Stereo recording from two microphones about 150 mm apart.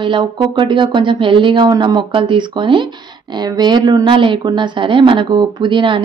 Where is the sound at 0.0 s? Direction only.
30° right (ahead or behind).